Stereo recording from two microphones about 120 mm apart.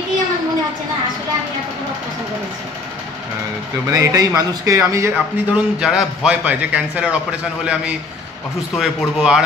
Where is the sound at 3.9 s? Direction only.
30° right (ahead or behind).